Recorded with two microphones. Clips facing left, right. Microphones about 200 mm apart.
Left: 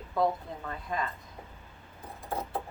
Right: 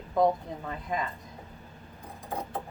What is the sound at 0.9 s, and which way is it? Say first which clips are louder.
Speech: right 1 dB; 15° right (ahead or behind).